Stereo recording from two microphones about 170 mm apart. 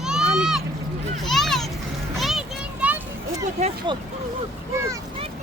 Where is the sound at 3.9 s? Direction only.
30° right (ahead or behind).